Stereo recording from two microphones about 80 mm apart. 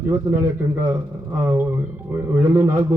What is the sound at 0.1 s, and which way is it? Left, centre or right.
A man's voice, right.